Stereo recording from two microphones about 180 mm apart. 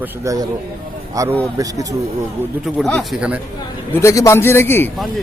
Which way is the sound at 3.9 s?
15° left (ahead or behind).